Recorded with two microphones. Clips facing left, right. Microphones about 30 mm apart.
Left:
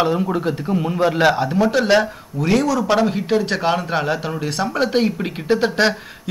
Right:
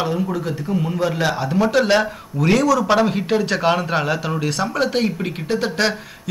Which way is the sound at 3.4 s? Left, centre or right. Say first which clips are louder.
Right 1 dB; centre.